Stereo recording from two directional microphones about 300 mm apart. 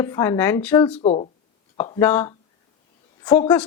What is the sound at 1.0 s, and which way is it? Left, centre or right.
A woman's voice, left.